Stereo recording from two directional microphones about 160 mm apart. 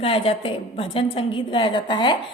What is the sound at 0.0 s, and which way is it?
A woman's voice, 35° left (ahead or behind).